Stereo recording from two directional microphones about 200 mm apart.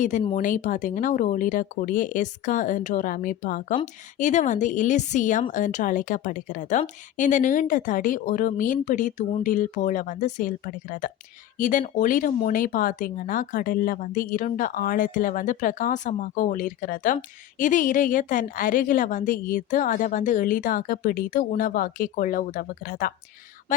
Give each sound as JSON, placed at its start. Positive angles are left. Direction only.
{"t": 0.3, "sound": "a woman's voice", "side_deg": 40}